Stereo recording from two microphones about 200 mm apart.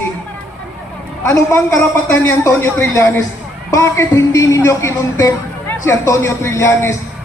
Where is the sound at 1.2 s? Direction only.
15° left (ahead or behind).